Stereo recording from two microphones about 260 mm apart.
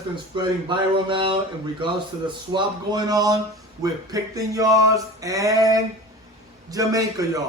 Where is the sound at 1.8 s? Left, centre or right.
Centre.